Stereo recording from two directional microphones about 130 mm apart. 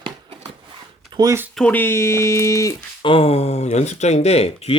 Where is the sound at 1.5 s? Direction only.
10° left (ahead or behind).